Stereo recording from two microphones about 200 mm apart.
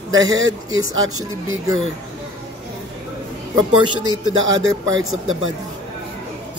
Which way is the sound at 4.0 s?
85° right.